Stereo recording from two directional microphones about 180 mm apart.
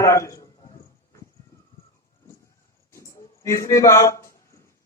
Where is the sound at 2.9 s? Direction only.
15° left (ahead or behind).